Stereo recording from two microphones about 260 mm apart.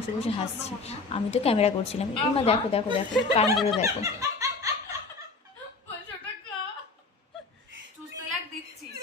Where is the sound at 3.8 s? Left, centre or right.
Centre.